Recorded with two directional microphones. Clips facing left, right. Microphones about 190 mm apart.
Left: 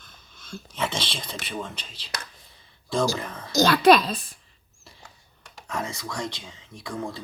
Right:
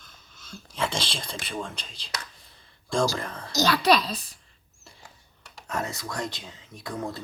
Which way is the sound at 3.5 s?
50° left (ahead or behind).